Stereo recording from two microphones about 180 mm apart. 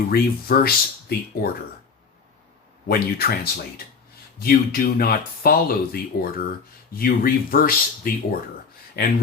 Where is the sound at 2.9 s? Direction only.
55° left (ahead or behind).